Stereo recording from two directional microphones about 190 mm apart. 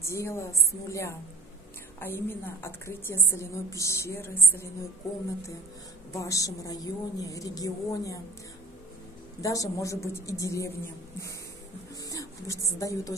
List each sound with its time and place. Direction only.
0.0 s a woman's voice: 15° left (ahead or behind)
6.1 s a woman's voice: 15° left (ahead or behind)
9.4 s a woman's voice: 15° left (ahead or behind)